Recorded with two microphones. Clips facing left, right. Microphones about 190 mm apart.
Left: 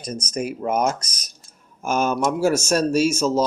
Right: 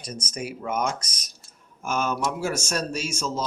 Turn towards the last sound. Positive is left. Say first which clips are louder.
# left 11 dB
turn(degrees=40)  # may be behind; listen again after turning